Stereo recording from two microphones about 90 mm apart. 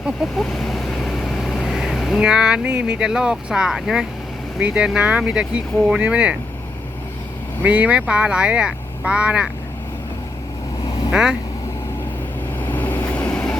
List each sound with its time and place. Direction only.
0.4 s speech: 5° left (ahead or behind); by 6.3 s 15° right (ahead or behind)
7.6 s speech: 15° right (ahead or behind)
11.1 s speech: 10° right (ahead or behind)
12.5 s vehicle: 20° left (ahead or behind)